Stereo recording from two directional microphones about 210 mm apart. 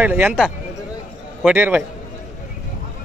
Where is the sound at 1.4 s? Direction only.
10° right (ahead or behind).